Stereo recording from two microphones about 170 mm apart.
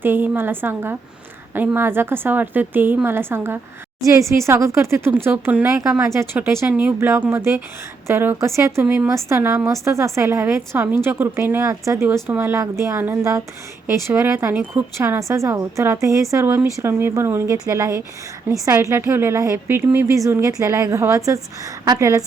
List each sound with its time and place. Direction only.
0.0 s speech: 10° right (ahead or behind)